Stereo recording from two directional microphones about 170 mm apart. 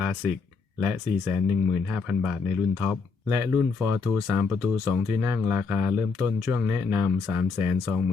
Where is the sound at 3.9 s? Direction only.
15° right (ahead or behind).